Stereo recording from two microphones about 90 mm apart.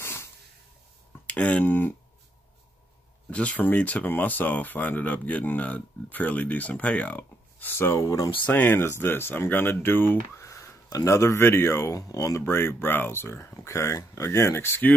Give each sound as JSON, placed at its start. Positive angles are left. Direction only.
{"t": 0.0, "sound": "a sound", "side_deg": 30}
{"t": 1.2, "sound": "speech", "side_deg": 15}
{"t": 3.3, "sound": "speech", "side_deg": 15}
{"t": 8.5, "sound": "speech", "side_deg": 20}